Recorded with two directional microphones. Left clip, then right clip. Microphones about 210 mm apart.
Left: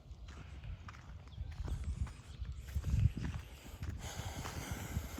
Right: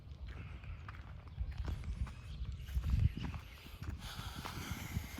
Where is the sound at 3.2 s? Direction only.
Centre (ahead or behind).